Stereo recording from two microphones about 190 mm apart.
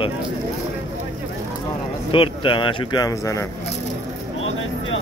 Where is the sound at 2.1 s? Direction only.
30° left (ahead or behind).